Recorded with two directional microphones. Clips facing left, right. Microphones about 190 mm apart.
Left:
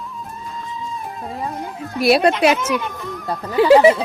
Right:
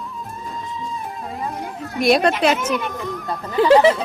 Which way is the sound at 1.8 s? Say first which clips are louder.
Left 1 dB; 5° left (ahead or behind).